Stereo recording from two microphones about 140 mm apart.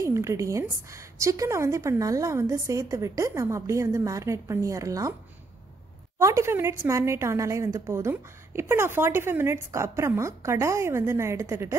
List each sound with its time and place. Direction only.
0.0 s a woman's voice: 20° right (ahead or behind)
6.1 s a woman's voice: 20° right (ahead or behind)